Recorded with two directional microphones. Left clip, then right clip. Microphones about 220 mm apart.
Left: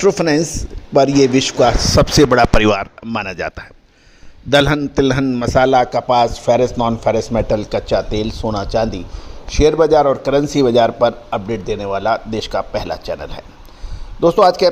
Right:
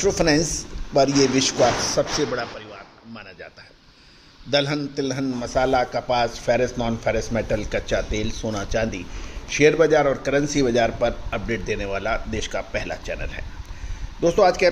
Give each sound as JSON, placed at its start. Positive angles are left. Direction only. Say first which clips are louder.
{"t": 0.0, "sound": "a man's voice", "louder": "left 5 dB", "side_deg": 40}